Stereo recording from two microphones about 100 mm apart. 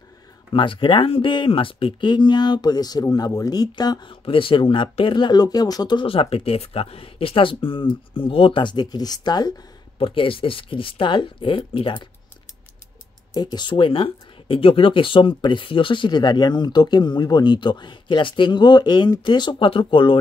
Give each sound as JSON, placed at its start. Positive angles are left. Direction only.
{"t": 0.5, "sound": "speech", "side_deg": 60}
{"t": 4.1, "sound": "speech", "side_deg": 60}
{"t": 6.0, "sound": "speech", "side_deg": 70}
{"t": 9.9, "sound": "speech", "side_deg": 65}
{"t": 13.3, "sound": "speech", "side_deg": 45}